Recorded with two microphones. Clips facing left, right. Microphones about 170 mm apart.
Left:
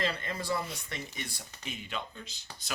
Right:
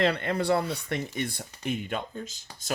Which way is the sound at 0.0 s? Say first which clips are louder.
Right 9 dB; 65° right (ahead or behind).